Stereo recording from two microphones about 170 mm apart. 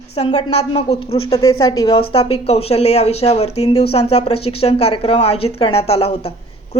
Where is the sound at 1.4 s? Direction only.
20° left (ahead or behind).